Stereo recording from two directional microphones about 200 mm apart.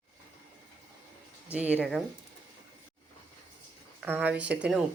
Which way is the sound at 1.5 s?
5° right (ahead or behind).